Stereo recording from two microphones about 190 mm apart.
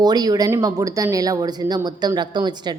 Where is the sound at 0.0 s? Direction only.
20° right (ahead or behind).